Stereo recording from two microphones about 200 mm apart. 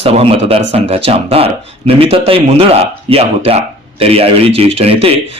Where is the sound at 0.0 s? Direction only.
30° right (ahead or behind).